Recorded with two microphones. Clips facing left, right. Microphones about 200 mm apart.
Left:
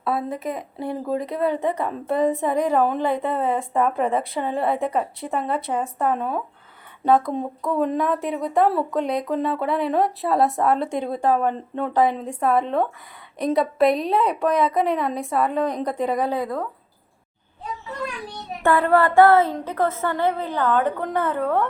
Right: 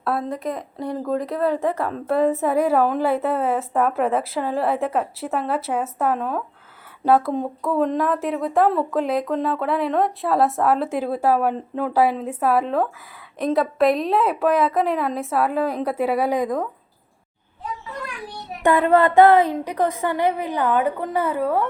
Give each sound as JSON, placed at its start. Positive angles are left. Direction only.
{"t": 0.0, "sound": "speech", "side_deg": 0}
{"t": 18.6, "sound": "a woman's voice", "side_deg": -20}